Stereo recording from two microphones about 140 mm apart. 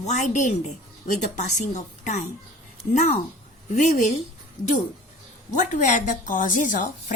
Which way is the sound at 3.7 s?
60° left (ahead or behind).